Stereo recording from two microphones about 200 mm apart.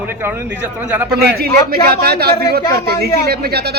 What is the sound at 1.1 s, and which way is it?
A man's voice, 50° right (ahead or behind).